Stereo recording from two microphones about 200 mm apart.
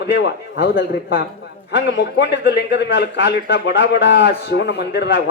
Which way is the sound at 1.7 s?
60° left (ahead or behind).